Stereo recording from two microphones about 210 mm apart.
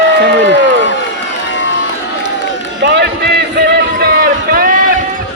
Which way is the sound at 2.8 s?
55° right (ahead or behind).